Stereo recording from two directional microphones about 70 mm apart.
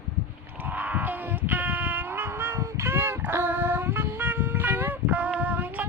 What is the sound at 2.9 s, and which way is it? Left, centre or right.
Dog, right.